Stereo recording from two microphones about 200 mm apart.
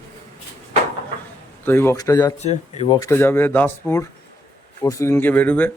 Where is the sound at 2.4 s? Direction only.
35° left (ahead or behind).